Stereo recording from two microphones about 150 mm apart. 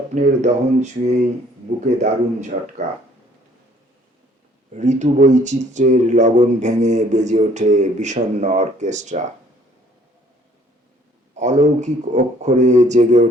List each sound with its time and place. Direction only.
0.1 s speech: 50° right (ahead or behind)
4.7 s speech: 50° right (ahead or behind)
11.3 s speech: 55° right (ahead or behind)